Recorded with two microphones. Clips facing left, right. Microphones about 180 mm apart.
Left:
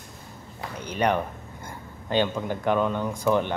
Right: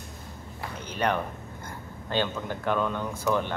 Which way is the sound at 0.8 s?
15° left (ahead or behind).